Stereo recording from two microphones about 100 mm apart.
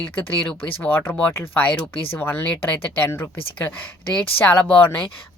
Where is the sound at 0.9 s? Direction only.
20° left (ahead or behind).